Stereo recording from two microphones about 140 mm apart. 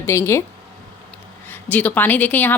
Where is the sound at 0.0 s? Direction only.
20° left (ahead or behind).